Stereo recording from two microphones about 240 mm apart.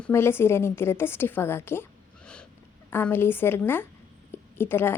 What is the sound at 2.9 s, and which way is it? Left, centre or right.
A woman's voice, centre.